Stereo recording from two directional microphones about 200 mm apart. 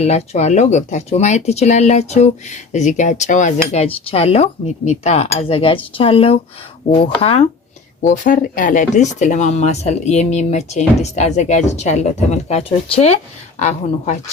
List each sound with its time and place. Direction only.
0.0 s speech: 35° left (ahead or behind)
8.0 s speech: 40° left (ahead or behind)